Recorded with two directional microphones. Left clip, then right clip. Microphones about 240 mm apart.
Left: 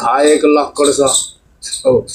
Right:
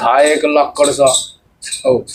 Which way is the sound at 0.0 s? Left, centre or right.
Right.